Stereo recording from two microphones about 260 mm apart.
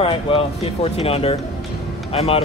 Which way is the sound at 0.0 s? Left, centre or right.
Left.